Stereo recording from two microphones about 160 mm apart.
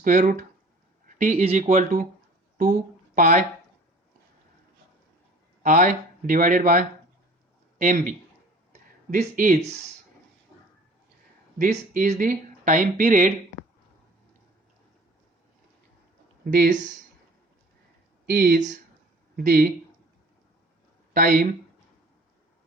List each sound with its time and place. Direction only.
0.0 s speech: 55° right (ahead or behind)
1.0 s a sound: 55° right (ahead or behind)
1.5 s speech: 45° right (ahead or behind)
3.2 s speech: 55° right (ahead or behind)
5.6 s speech: 55° right (ahead or behind)
11.5 s speech: 50° right (ahead or behind)
16.6 s speech: 50° right (ahead or behind)
18.3 s speech: 65° right (ahead or behind)
21.1 s speech: 55° right (ahead or behind)